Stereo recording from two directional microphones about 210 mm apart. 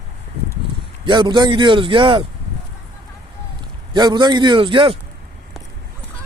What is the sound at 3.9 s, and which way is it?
A man's voice, 20° right (ahead or behind).